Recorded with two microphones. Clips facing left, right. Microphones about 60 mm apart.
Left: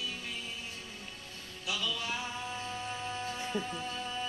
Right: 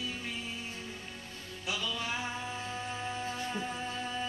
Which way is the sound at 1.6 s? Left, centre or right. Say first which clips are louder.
Even; right.